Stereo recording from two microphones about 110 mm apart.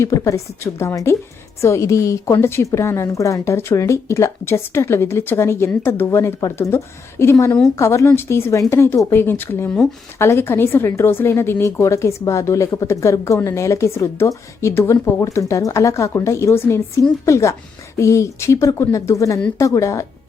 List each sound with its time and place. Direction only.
0.0 s a woman's voice: 25° left (ahead or behind)